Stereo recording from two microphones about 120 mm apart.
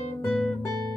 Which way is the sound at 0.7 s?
35° right (ahead or behind).